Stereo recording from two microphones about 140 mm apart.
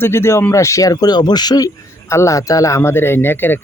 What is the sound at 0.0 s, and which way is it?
Speech, 15° left (ahead or behind).